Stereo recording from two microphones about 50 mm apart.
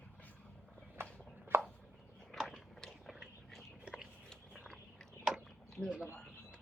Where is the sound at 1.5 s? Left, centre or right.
Right.